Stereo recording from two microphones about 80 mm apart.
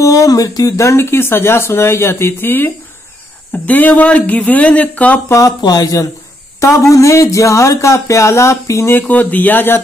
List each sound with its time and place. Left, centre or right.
0.0 s speech: left; by 5.2 s centre
5.6 s speech: left
8.9 s speech: left